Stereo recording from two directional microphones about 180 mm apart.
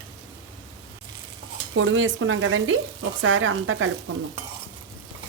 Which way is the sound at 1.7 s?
90° right.